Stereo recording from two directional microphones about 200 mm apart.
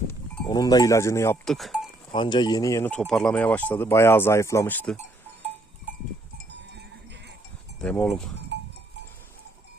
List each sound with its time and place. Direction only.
0.4 s speech: 20° left (ahead or behind)
1.5 s speech: centre (ahead or behind)
2.1 s speech: 25° left (ahead or behind)
6.5 s cowbell: 60° right (ahead or behind)
7.8 s speech: 5° left (ahead or behind)